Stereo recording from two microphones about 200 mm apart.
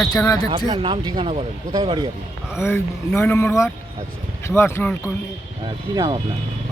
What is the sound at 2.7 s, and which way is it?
Speech, 10° left (ahead or behind).